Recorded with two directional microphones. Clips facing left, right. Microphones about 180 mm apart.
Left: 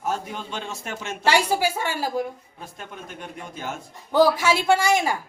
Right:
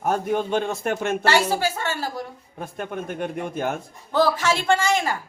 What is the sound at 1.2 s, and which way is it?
A woman's voice, 15° left (ahead or behind).